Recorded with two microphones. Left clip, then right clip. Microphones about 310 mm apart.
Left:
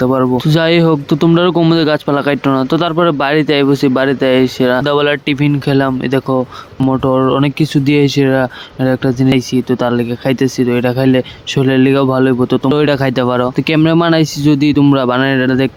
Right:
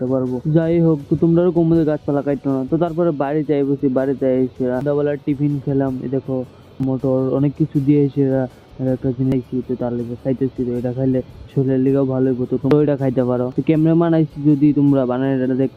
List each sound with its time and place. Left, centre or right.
0.0 s speech: left
9.8 s speech: left